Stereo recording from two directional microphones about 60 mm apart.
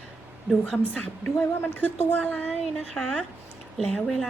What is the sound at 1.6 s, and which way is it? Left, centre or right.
A woman's voice, left.